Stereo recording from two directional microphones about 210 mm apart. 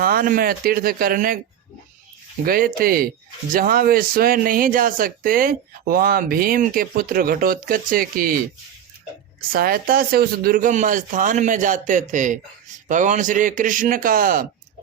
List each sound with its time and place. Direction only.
0.0 s speech: 45° right (ahead or behind)
2.4 s speech: 45° right (ahead or behind)
9.5 s a man's voice: 45° right (ahead or behind)